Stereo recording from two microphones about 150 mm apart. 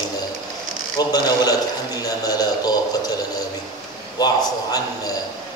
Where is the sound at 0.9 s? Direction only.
25° left (ahead or behind).